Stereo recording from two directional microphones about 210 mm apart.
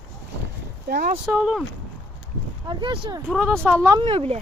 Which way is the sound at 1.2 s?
Centre (ahead or behind).